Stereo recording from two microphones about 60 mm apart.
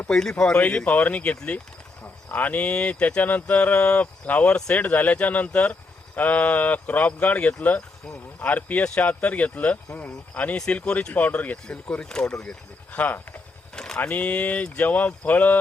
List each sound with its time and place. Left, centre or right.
0.1 s speech: centre
0.5 s speech: left
12.9 s speech: left
13.7 s vehicle: centre
14.0 s speech: left